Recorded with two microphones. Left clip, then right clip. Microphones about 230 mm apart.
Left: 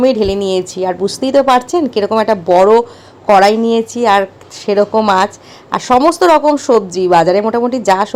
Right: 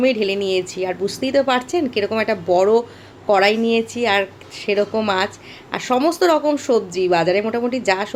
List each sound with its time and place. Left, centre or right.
0.0 s a woman's voice: left